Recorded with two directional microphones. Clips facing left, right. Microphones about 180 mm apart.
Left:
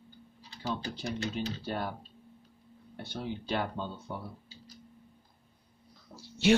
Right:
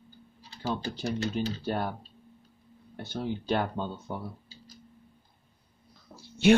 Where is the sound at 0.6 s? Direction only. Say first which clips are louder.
Right 4 dB; 40° right (ahead or behind).